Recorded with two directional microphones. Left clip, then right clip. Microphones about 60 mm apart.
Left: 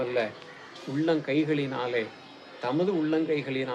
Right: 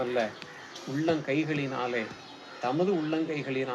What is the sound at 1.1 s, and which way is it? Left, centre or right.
Speech, left.